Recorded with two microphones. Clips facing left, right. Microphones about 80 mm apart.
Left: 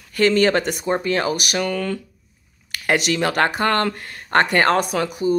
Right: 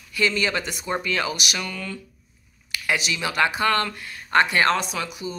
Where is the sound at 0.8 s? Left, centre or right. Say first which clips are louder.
Left 5 dB; left.